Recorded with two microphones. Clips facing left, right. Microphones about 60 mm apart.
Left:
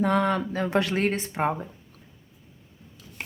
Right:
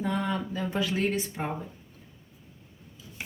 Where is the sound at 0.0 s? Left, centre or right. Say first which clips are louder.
Left 7 dB; left.